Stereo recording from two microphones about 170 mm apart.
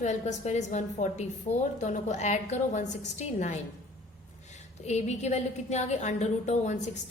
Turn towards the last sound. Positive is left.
turn(degrees=45)  # may be behind; listen again after turning